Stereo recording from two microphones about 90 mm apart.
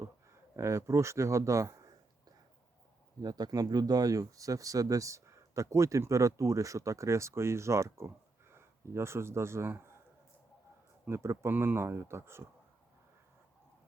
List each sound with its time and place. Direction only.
0.5 s speech: 35° right (ahead or behind)
3.2 s speech: 45° right (ahead or behind); by 9.9 s 25° right (ahead or behind)
11.1 s speech: 30° right (ahead or behind)